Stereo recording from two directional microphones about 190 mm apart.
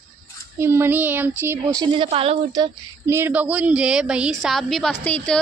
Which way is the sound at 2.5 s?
15° right (ahead or behind).